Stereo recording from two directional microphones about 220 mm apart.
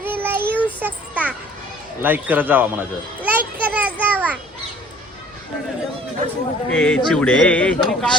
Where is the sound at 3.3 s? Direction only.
5° right (ahead or behind).